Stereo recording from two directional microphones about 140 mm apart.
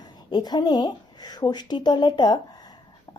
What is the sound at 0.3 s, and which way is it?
Speech, 30° left (ahead or behind).